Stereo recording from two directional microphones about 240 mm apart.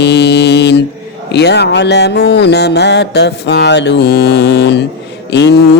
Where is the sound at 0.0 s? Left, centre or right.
Left.